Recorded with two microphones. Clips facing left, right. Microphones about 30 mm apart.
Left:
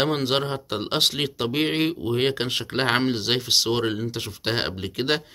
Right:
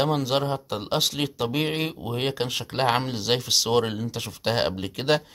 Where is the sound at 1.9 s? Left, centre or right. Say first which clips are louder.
Left 6 dB; centre.